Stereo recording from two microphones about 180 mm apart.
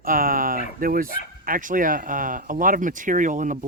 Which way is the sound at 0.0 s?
50° right (ahead or behind).